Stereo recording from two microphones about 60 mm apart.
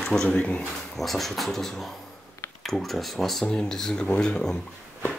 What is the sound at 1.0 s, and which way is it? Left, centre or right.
Speech, centre.